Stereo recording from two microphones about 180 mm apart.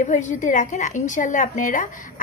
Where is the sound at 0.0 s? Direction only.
45° left (ahead or behind).